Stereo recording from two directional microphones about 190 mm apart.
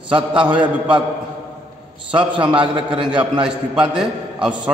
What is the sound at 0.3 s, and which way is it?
Speech, 5° right (ahead or behind).